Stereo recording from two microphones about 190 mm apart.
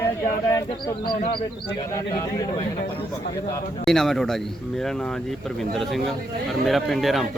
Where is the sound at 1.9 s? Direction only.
20° left (ahead or behind).